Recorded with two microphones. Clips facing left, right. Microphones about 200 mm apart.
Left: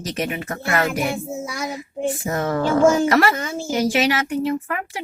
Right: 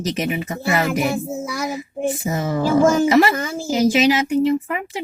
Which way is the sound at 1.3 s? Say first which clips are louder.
Right 3 dB; centre (ahead or behind).